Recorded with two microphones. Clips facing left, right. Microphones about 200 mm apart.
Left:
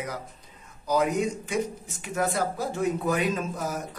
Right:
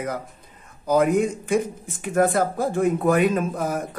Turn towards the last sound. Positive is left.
turn(degrees=-55)  # may be behind; listen again after turning